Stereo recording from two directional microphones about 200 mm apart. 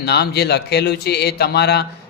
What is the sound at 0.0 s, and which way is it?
Speech, 55° left (ahead or behind).